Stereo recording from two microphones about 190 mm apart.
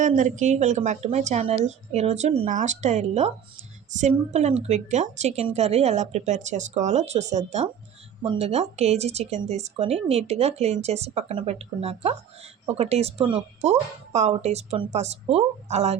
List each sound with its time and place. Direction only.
0.0 s speech: 40° right (ahead or behind)